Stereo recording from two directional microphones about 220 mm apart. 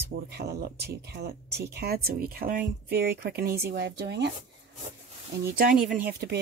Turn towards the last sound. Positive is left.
turn(degrees=-45)  # may be behind; listen again after turning